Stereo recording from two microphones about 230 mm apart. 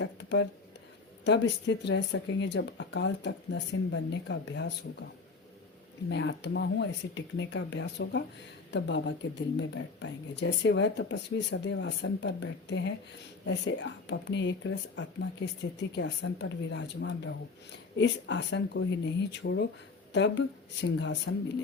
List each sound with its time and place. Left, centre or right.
0.0 s a sound: left
1.2 s speech: left
6.1 s speech: left